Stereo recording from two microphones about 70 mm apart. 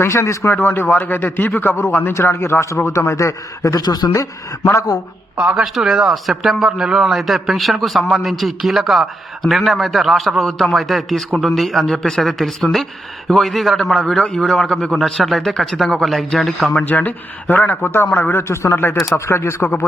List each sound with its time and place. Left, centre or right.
0.0 s a man's voice: left
0.6 s a man's voice: left
3.8 s speech: left
4.1 s a man's voice: left
5.5 s a man's voice: centre
16.8 s a man's voice: left